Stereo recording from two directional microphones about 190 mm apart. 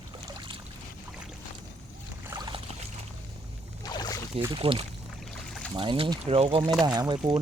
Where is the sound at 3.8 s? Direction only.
20° left (ahead or behind).